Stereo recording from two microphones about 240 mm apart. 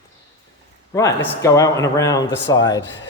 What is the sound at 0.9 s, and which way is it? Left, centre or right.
Speech, centre.